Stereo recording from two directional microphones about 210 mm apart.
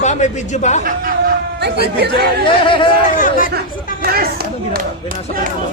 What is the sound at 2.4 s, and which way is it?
Speech, 25° left (ahead or behind).